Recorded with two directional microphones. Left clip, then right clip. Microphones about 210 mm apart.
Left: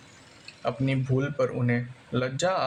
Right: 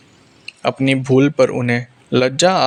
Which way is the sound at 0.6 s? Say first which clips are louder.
Right 12 dB; 35° right (ahead or behind).